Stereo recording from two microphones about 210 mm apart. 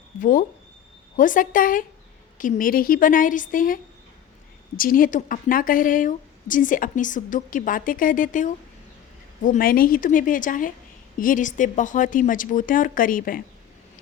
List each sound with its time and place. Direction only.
0.2 s a woman's voice: 40° left (ahead or behind)
4.8 s a woman's voice: 40° left (ahead or behind)